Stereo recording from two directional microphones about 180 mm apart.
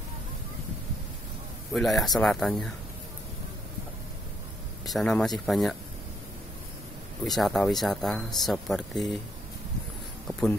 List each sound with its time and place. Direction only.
1.7 s speech: centre (ahead or behind)
4.8 s speech: centre (ahead or behind)
7.2 s speech: centre (ahead or behind)